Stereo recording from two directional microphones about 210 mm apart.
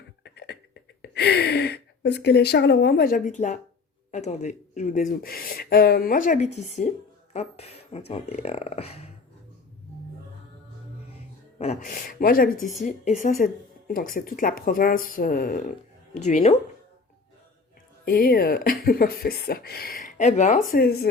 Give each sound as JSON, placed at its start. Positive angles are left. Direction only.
{"t": 0.3, "sound": "speech", "side_deg": 55}
{"t": 11.5, "sound": "speech", "side_deg": 30}
{"t": 18.0, "sound": "speech", "side_deg": 45}
{"t": 20.7, "sound": "speech", "side_deg": 45}